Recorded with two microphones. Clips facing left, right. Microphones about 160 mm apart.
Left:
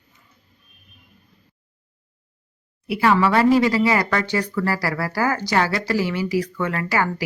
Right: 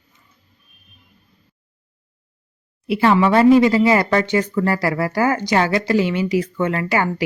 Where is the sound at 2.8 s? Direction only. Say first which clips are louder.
Right 3 dB; 25° right (ahead or behind).